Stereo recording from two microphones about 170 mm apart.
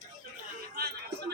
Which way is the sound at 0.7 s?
65° right (ahead or behind).